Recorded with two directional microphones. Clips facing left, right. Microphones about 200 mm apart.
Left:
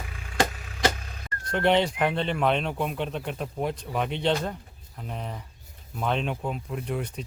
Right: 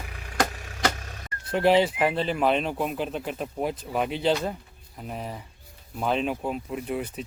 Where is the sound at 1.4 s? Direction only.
5° right (ahead or behind).